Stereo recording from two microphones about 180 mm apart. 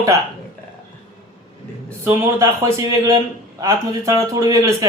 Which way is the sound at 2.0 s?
15° right (ahead or behind).